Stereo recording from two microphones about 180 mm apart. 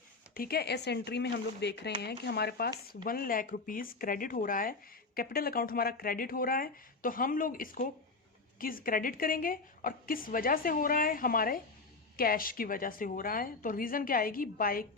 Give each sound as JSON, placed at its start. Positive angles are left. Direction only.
{"t": 0.3, "sound": "speech", "side_deg": 60}
{"t": 3.0, "sound": "a woman's voice", "side_deg": 50}